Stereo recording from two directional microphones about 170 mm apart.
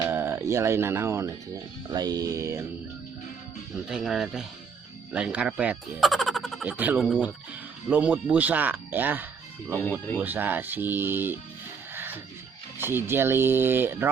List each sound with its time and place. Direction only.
0.1 s speech: 15° right (ahead or behind)
3.8 s speech: 5° right (ahead or behind)
9.7 s speech: 10° left (ahead or behind)
10.2 s speech: 10° right (ahead or behind)
11.9 s music: 10° right (ahead or behind)
12.8 s speech: 15° right (ahead or behind)